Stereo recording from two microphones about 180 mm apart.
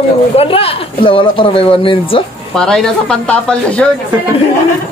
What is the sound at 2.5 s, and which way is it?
Speech, 5° left (ahead or behind).